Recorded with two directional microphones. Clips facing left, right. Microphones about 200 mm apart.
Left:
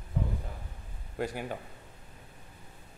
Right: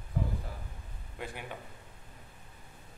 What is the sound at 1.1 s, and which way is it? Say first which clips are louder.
Speech: left 8 dB; 40° left (ahead or behind).